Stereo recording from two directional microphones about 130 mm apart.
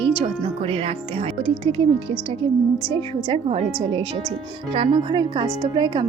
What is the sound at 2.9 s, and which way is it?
Speech, 45° right (ahead or behind).